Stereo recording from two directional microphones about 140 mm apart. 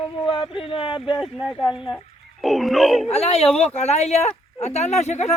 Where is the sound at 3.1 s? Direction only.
45° left (ahead or behind).